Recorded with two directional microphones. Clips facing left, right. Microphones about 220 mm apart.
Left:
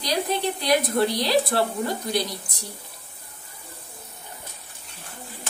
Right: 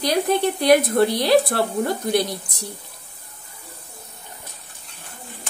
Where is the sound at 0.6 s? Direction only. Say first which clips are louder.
Right 6 dB; 55° right (ahead or behind).